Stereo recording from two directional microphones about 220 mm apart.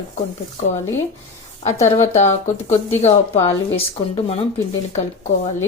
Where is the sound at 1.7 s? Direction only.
15° left (ahead or behind).